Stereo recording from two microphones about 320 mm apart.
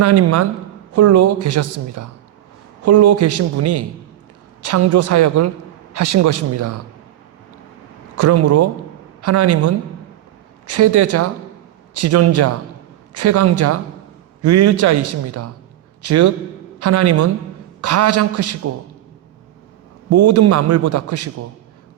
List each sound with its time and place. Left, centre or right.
0.0 s a man's voice: right
6.0 s a man's voice: right
6.2 s a man's voice: right
8.2 s a man's voice: right
10.8 s a man's voice: right
12.3 s a man's voice: right
16.0 s a man's voice: right
20.1 s a man's voice: right